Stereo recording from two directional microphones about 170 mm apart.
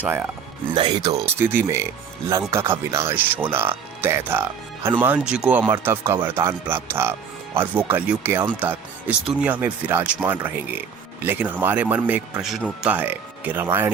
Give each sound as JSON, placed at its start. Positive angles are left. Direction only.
{"t": 0.0, "sound": "speech", "side_deg": -10}
{"t": 0.7, "sound": "speech", "side_deg": -30}
{"t": 1.1, "sound": "speech", "side_deg": -15}